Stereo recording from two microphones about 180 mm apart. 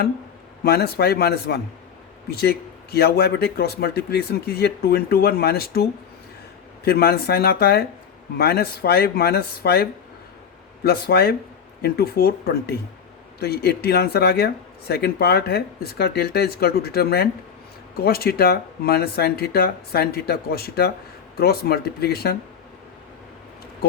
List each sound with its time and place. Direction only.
0.6 s speech: 60° left (ahead or behind)
10.8 s speech: 60° left (ahead or behind)